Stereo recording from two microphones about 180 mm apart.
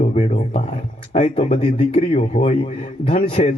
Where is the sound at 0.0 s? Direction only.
40° left (ahead or behind).